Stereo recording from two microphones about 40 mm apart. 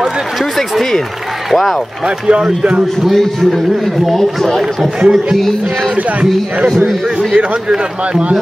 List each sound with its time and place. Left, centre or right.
0.6 s a man's voice: centre
2.0 s a man's voice: right
3.0 s a man's voice: centre
7.3 s a man's voice: right